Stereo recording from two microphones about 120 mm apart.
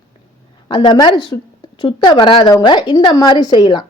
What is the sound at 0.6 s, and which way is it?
A woman's voice, 40° left (ahead or behind).